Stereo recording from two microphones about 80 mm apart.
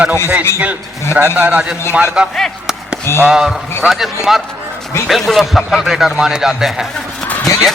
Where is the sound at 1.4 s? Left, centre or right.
Centre.